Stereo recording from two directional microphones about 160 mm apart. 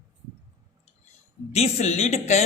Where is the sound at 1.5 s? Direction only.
40° left (ahead or behind).